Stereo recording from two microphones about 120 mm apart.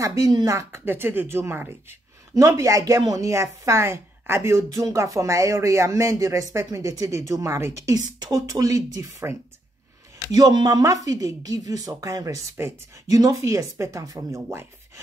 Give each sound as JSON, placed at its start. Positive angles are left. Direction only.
{"t": 0.0, "sound": "a woman's voice", "side_deg": -30}
{"t": 0.5, "sound": "a woman's voice", "side_deg": -25}